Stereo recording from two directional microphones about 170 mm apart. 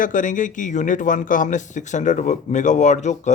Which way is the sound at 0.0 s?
50° left (ahead or behind).